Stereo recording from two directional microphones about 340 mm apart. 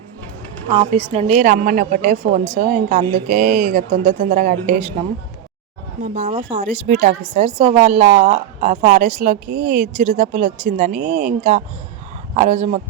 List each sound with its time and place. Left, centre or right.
0.7 s a woman's voice: centre
6.0 s a woman's voice: right